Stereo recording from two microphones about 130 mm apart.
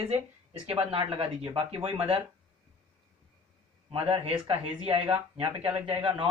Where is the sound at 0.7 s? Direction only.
45° right (ahead or behind).